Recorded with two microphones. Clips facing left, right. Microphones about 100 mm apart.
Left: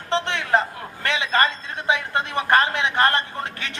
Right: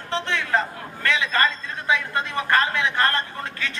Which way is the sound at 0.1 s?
20° left (ahead or behind).